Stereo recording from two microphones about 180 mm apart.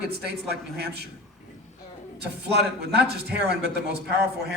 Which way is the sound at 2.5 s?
65° right (ahead or behind).